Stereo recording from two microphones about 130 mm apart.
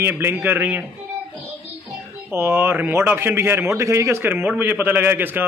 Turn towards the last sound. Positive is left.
turn(degrees=-15)  # may be behind; listen again after turning